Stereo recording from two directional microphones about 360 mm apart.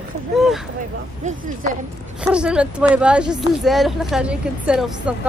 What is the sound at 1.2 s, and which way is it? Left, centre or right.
Speech, centre.